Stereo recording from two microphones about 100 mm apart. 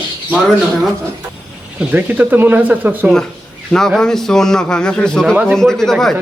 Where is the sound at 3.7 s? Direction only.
5° left (ahead or behind).